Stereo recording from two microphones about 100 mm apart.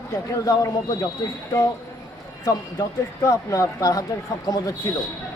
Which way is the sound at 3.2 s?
30° left (ahead or behind).